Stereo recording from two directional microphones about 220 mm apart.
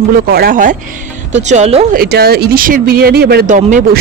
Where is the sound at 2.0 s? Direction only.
45° right (ahead or behind).